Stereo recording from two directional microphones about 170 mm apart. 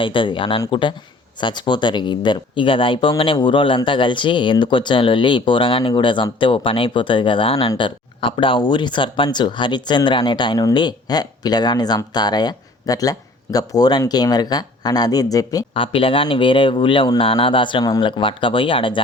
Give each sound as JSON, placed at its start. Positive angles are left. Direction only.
{"t": 0.0, "sound": "speech", "side_deg": 30}
{"t": 15.7, "sound": "speech", "side_deg": 30}